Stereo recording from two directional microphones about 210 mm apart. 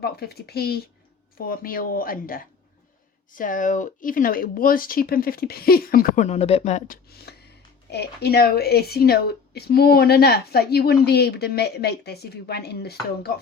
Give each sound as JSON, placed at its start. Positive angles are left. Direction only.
{"t": 0.0, "sound": "speech", "side_deg": 50}